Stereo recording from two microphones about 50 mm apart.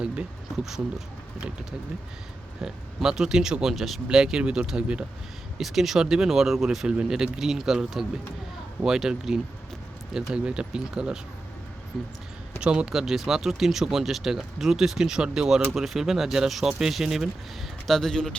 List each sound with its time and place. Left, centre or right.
0.5 s speech: centre
2.6 s speech: centre
4.1 s speech: centre
5.5 s speech: centre
11.9 s speech: centre
12.5 s speech: centre
12.9 s speech: centre
17.8 s speech: centre